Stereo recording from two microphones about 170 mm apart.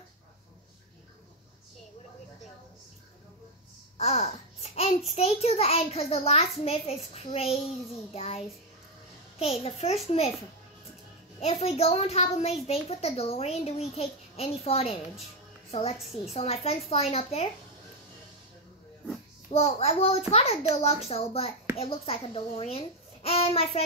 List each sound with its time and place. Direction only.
4.0 s a child's voice: 40° left (ahead or behind)
11.3 s a woman's voice: 40° left (ahead or behind)
16.3 s a woman's voice: 35° left (ahead or behind)
19.5 s a woman's voice: 40° left (ahead or behind)